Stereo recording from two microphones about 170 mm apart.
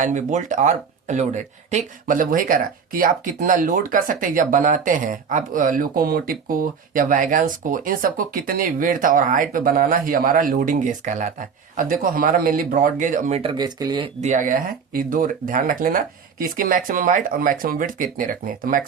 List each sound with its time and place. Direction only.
0.0 s speech: 45° right (ahead or behind)
13.4 s speech: 25° right (ahead or behind)
14.2 s speech: 45° right (ahead or behind)